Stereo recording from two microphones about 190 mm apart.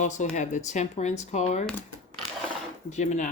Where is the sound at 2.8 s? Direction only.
40° left (ahead or behind).